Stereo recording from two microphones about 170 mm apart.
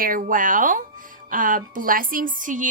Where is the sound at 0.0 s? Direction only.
55° right (ahead or behind).